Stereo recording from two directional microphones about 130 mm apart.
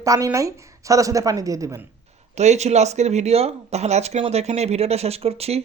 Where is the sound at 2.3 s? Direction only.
60° right (ahead or behind).